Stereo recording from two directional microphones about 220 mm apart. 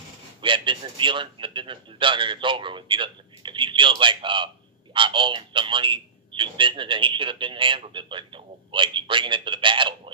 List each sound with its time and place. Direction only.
0.4 s a man's voice: 20° right (ahead or behind)